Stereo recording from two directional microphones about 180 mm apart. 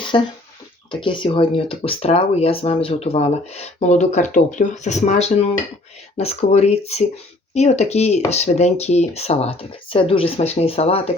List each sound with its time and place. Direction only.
0.1 s speech: 25° left (ahead or behind)